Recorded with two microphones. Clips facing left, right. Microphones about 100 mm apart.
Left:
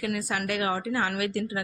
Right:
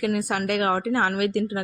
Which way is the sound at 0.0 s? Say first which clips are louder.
Right 5 dB; 55° right (ahead or behind).